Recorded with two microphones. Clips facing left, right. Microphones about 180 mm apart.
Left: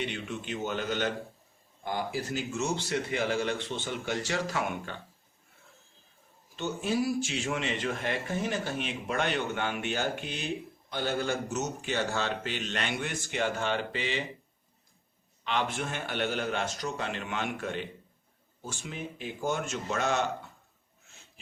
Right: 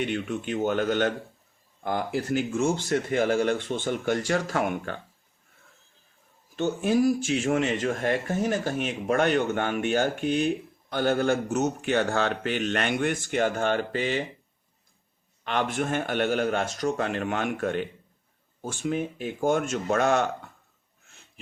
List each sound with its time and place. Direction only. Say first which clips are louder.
0.0 s speech: right 7 dB; 50° right (ahead or behind)
6.6 s speech: right 7 dB; 50° right (ahead or behind)
15.4 s speech: right 5 dB; 50° right (ahead or behind)